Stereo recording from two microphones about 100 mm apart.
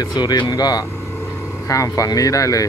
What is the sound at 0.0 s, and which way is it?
Speech, 40° left (ahead or behind).